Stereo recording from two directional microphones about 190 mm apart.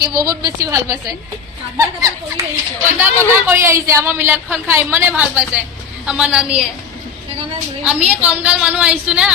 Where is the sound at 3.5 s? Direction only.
15° right (ahead or behind).